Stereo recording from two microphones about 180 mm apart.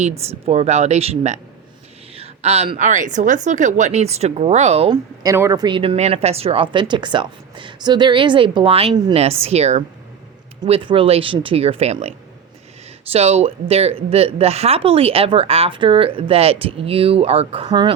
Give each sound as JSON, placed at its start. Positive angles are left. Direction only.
{"t": 0.0, "sound": "a woman's voice", "side_deg": -35}
{"t": 5.2, "sound": "a woman's voice", "side_deg": -20}